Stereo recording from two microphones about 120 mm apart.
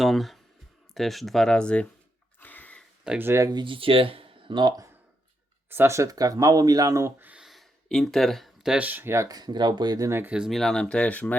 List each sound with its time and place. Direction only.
0.0 s speech: centre (ahead or behind)
2.4 s a sound: 15° left (ahead or behind)
3.0 s speech: 10° right (ahead or behind)
3.2 s speech: 25° right (ahead or behind)
3.5 s speech: 45° right (ahead or behind)
5.6 s speech: 20° right (ahead or behind)
7.2 s a sound: 15° right (ahead or behind)
7.4 s speech: centre (ahead or behind); by 10.1 s 35° right (ahead or behind)
10.1 s speech: 20° right (ahead or behind)
10.3 s speech: centre (ahead or behind)